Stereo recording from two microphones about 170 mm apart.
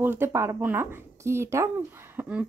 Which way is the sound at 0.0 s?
15° right (ahead or behind).